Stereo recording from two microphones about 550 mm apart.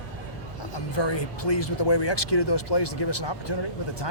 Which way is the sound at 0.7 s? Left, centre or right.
Left.